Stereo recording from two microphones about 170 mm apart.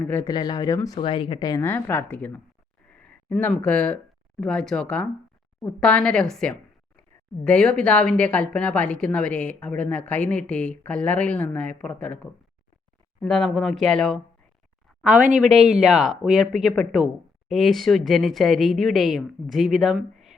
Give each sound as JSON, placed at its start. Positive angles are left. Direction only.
{"t": 0.0, "sound": "a woman's voice", "side_deg": 10}
{"t": 0.3, "sound": "a woman's voice", "side_deg": 25}
{"t": 15.8, "sound": "speech", "side_deg": 0}